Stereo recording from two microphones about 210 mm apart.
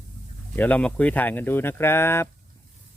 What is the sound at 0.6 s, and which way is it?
Speech, 5° left (ahead or behind).